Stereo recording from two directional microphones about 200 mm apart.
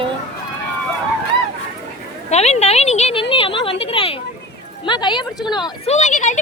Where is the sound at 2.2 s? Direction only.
35° left (ahead or behind).